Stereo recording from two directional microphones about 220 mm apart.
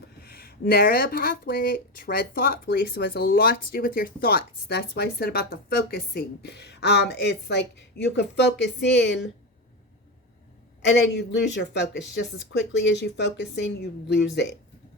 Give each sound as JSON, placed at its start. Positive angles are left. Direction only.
{"t": 0.2, "sound": "speech", "side_deg": 45}
{"t": 10.8, "sound": "speech", "side_deg": 50}